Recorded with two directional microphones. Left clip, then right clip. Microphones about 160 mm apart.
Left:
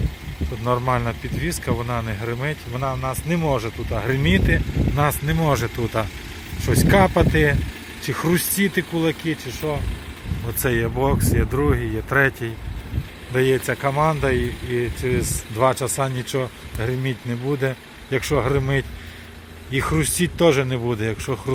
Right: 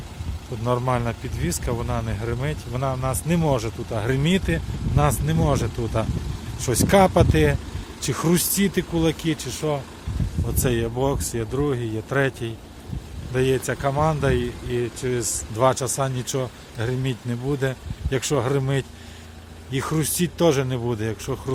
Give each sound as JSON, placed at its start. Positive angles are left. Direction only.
{"t": 0.9, "sound": "speech", "side_deg": -15}
{"t": 2.7, "sound": "speech", "side_deg": -25}
{"t": 6.6, "sound": "speech", "side_deg": -20}
{"t": 10.6, "sound": "speech", "side_deg": 0}